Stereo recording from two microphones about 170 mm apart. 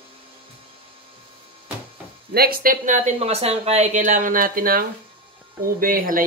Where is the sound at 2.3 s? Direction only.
60° right (ahead or behind).